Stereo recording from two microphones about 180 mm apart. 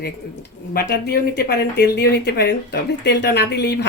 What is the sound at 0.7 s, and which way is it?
Speech, 60° left (ahead or behind).